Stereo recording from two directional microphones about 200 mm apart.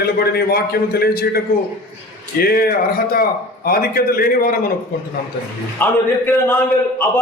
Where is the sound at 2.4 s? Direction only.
50° left (ahead or behind).